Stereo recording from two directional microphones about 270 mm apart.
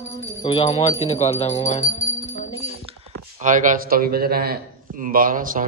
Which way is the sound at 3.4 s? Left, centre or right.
Right.